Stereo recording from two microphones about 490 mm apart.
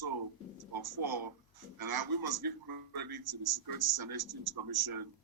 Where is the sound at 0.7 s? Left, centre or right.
Right.